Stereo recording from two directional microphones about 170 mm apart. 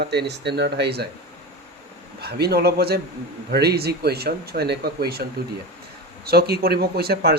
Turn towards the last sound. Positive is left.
turn(degrees=-65)  # may be behind; listen again after turning